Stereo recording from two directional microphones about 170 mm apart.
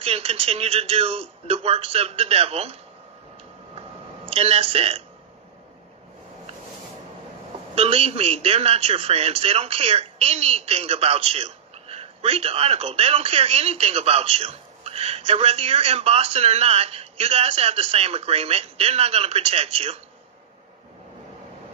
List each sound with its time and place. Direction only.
0.0 s a man's voice: 35° right (ahead or behind)
4.3 s a man's voice: 35° right (ahead or behind)
7.7 s a man's voice: 35° right (ahead or behind)